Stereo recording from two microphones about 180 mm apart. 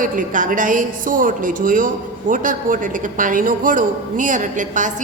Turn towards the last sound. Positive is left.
turn(degrees=-45)  # may be behind; listen again after turning